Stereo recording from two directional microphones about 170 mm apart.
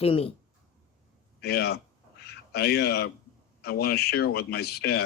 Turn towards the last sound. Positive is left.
turn(degrees=70)  # may be behind; listen again after turning